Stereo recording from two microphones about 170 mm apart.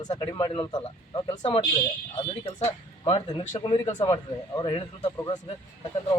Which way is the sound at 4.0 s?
25° left (ahead or behind).